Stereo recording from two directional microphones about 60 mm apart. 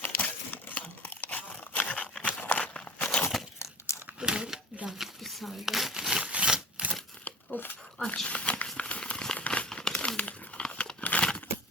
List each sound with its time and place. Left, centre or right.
0.0 s crumpling: left
2.2 s a sound: left
2.7 s walk: centre
4.2 s crumpling: centre
6.2 s a sound: centre
7.3 s crumpling: left
8.0 s a sound: centre
9.5 s crumpling: centre
10.2 s crumpling: left